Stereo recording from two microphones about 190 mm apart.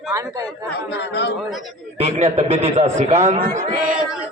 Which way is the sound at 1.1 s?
65° left (ahead or behind).